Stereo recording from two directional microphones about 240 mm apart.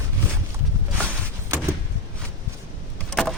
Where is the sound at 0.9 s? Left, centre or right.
Centre.